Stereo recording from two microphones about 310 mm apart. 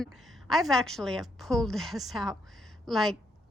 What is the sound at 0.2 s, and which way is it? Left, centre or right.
A woman's voice, centre.